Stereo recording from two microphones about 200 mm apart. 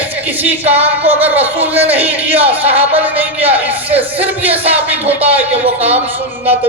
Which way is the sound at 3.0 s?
10° right (ahead or behind).